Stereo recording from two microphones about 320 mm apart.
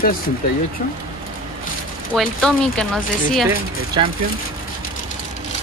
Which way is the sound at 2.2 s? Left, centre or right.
Centre.